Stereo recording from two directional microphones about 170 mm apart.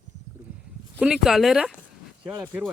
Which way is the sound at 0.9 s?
5° right (ahead or behind).